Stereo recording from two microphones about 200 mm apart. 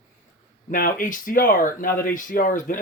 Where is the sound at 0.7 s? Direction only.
40° left (ahead or behind).